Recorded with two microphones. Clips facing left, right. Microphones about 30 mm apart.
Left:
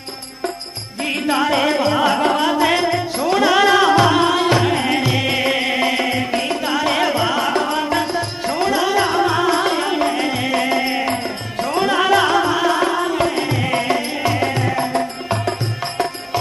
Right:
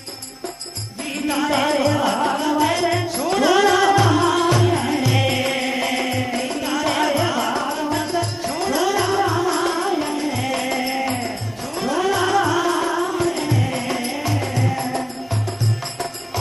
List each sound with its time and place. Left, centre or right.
1.0 s music: left
1.5 s music: centre
1.8 s music: left
3.2 s music: centre
3.9 s music: left
5.1 s music: centre
8.5 s music: left
9.0 s music: left
10.5 s music: left
11.6 s music: left
12.5 s music: left